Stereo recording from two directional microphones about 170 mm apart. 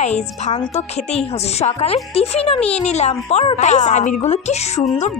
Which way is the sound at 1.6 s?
40° left (ahead or behind).